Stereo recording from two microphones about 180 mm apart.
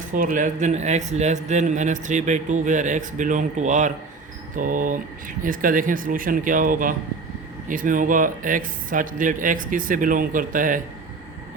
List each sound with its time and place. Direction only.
0.1 s a man's voice: 50° right (ahead or behind)